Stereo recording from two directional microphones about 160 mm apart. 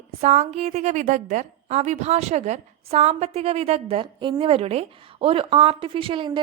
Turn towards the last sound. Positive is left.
turn(degrees=-35)  # may be behind; listen again after turning